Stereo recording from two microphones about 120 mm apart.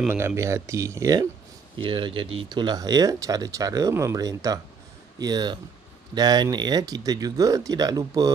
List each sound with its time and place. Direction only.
0.1 s speech: 20° right (ahead or behind)
1.8 s speech: 45° right (ahead or behind)